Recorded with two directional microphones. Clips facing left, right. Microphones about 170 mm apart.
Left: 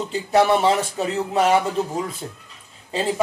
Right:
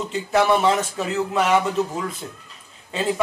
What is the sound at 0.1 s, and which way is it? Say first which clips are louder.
Speech: left 1 dB; 30° left (ahead or behind).